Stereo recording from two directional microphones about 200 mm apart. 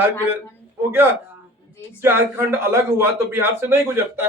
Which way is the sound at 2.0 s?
10° right (ahead or behind).